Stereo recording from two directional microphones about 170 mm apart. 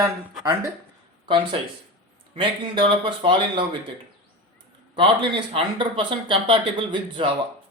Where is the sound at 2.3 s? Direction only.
30° right (ahead or behind).